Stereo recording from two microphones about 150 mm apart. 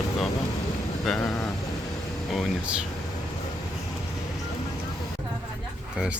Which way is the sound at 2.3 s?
5° right (ahead or behind).